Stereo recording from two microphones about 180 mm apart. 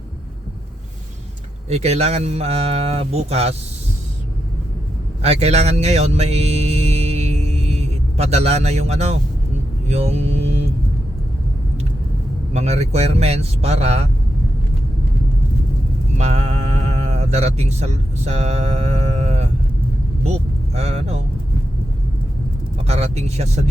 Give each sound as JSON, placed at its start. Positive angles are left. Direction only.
{"t": 1.7, "sound": "speech", "side_deg": -35}
{"t": 5.2, "sound": "speech", "side_deg": -35}
{"t": 9.9, "sound": "music", "side_deg": -35}
{"t": 12.5, "sound": "speech", "side_deg": -35}
{"t": 16.1, "sound": "speech", "side_deg": -35}
{"t": 20.7, "sound": "speech", "side_deg": -35}
{"t": 22.8, "sound": "speech", "side_deg": -35}